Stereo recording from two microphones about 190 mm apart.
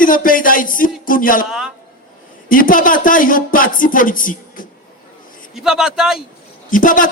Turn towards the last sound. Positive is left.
turn(degrees=45)  # may be behind; listen again after turning